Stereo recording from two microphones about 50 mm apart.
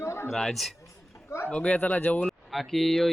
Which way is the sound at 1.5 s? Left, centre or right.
Left.